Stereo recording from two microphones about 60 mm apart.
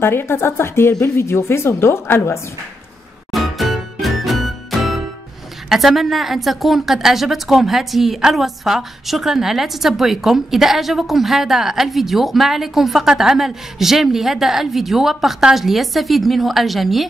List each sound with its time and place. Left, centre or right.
0.0 s a woman's voice: left
3.3 s music: centre
5.7 s a woman's voice: centre